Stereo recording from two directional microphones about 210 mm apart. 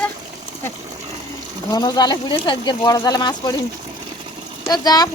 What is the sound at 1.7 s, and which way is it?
Speech, 20° left (ahead or behind).